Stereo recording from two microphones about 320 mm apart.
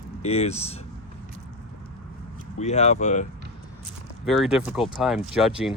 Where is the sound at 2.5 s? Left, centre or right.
Centre.